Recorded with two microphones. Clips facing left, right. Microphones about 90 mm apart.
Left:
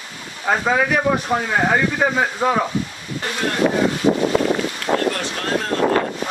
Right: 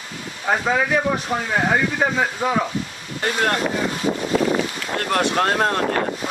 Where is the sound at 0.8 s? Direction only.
10° left (ahead or behind).